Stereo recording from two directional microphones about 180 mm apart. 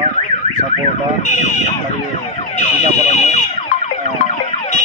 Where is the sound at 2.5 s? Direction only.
40° left (ahead or behind).